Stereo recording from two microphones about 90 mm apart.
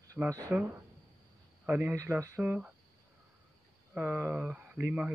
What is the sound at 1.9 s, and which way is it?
Speech, 35° right (ahead or behind).